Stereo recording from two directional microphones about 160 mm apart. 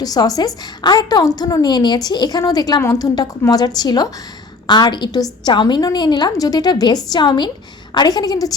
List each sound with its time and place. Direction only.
0.0 s a woman's voice: 25° left (ahead or behind)